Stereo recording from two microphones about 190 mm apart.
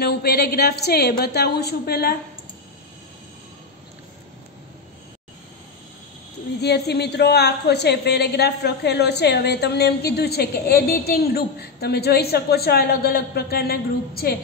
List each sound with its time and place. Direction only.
0.0 s a woman's voice: 55° left (ahead or behind)
6.6 s a woman's voice: 60° left (ahead or behind)